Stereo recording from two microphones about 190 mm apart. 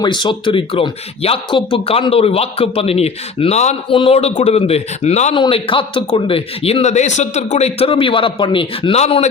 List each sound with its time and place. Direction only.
0.0 s a man's voice: 25° left (ahead or behind)